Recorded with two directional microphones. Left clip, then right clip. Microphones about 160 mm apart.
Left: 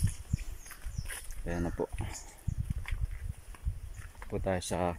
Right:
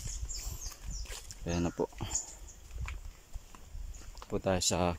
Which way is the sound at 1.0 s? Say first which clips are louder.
Even; 15° right (ahead or behind).